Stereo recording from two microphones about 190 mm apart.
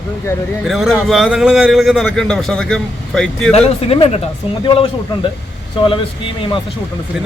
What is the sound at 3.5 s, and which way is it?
Speech, 30° left (ahead or behind).